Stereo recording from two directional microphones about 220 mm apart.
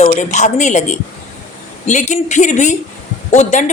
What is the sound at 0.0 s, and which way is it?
A woman's voice, 30° left (ahead or behind).